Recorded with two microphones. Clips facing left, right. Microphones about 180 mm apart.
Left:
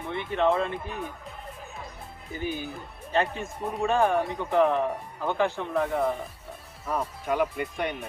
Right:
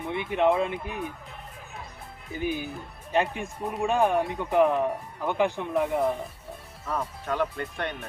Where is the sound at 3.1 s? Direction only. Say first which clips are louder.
Right 1 dB; 15° right (ahead or behind).